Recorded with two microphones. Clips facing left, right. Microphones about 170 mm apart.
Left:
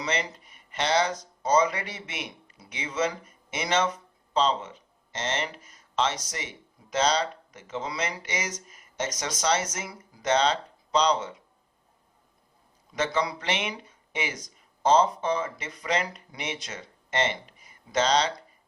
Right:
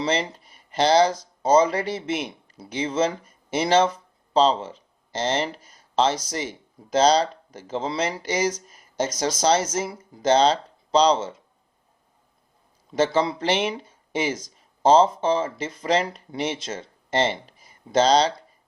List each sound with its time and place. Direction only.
0.0 s speech: 30° right (ahead or behind)
12.9 s speech: 30° right (ahead or behind)